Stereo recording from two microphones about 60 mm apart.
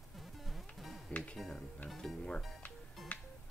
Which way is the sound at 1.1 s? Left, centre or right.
Left.